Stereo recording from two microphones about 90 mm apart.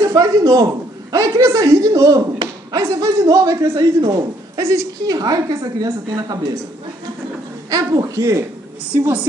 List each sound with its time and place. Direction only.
0.0 s a sound: 40° right (ahead or behind)
1.1 s a woman's voice: 40° right (ahead or behind)
7.7 s a woman's voice: 40° right (ahead or behind)
8.9 s speech: 20° right (ahead or behind)